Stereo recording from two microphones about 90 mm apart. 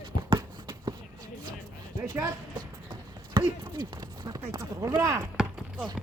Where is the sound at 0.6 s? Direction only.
50° right (ahead or behind).